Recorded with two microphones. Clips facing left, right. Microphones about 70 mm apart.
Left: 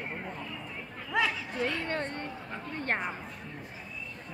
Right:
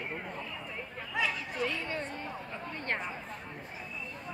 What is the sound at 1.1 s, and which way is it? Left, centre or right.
Speech, left.